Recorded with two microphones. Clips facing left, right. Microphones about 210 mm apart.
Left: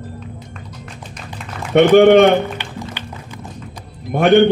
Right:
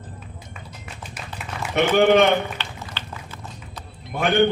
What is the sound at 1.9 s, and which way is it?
Speech, 55° left (ahead or behind).